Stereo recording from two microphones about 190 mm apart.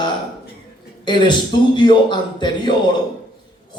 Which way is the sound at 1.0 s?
25° left (ahead or behind).